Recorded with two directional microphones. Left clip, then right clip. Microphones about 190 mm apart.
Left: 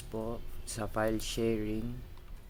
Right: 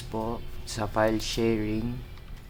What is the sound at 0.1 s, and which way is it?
Speech, 10° left (ahead or behind).